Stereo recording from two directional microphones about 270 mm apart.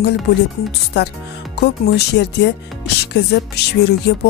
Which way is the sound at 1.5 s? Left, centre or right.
Left.